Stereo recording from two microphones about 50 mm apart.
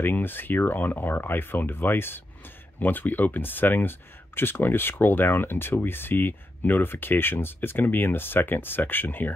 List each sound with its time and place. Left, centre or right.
0.0 s speech: left